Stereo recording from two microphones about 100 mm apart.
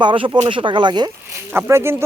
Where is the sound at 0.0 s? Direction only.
55° right (ahead or behind).